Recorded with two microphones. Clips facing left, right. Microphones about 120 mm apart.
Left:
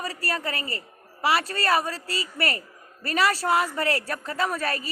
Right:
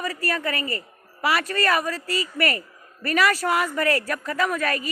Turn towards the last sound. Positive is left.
turn(degrees=35)  # may be behind; listen again after turning